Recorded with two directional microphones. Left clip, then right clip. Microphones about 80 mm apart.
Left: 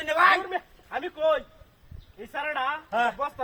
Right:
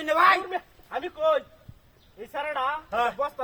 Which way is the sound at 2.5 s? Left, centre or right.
Right.